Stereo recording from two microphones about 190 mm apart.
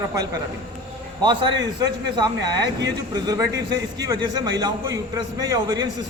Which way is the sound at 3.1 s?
20° right (ahead or behind).